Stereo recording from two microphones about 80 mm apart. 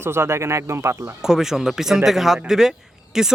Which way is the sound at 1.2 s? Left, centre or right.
Centre.